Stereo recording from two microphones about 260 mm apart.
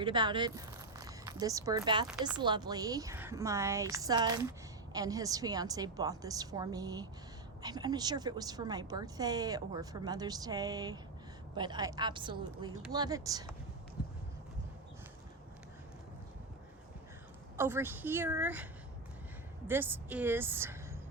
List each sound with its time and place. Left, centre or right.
0.0 s speech: centre
2.0 s speech: centre
2.4 s a woman's voice: centre
14.0 s a sound: centre
17.6 s a woman's voice: centre